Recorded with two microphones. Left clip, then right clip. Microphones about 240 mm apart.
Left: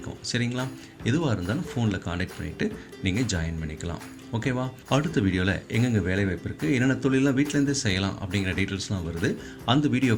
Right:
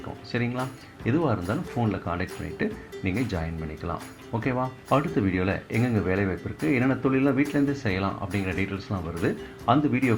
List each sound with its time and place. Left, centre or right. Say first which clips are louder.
0.3 s speech: even; left